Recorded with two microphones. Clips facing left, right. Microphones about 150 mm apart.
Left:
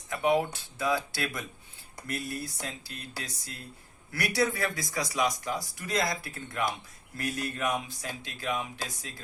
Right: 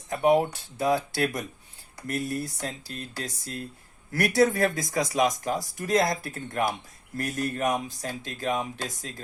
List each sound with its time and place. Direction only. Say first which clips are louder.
0.1 s speech: right 5 dB; 40° right (ahead or behind)
4.1 s speech: right 7 dB; 45° right (ahead or behind)